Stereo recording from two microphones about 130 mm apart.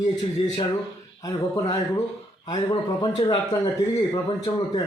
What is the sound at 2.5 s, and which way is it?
A man's voice, 35° left (ahead or behind).